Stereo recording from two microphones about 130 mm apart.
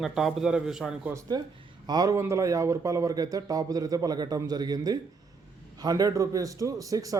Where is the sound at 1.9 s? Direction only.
30° right (ahead or behind).